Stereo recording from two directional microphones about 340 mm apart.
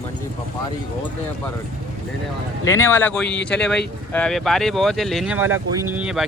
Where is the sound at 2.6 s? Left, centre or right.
Centre.